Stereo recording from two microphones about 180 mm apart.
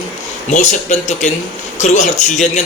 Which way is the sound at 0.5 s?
40° left (ahead or behind).